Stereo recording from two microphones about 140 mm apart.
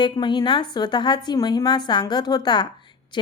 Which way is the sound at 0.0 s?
30° left (ahead or behind).